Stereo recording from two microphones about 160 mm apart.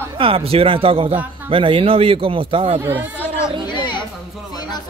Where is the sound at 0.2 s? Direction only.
35° right (ahead or behind).